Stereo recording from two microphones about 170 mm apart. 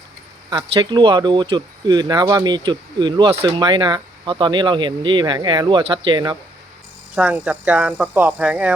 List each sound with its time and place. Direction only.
0.5 s speech: 25° right (ahead or behind)
7.2 s speech: 5° right (ahead or behind)